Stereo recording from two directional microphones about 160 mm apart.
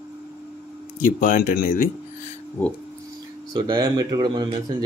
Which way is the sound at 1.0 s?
55° left (ahead or behind).